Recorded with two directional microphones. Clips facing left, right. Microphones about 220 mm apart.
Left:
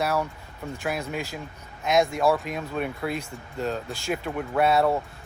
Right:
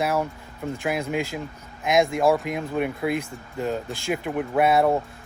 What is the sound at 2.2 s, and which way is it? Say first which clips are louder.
Speech: right 3 dB; 15° right (ahead or behind).